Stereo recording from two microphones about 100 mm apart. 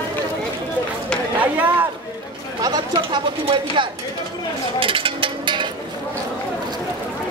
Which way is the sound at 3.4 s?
55° right (ahead or behind).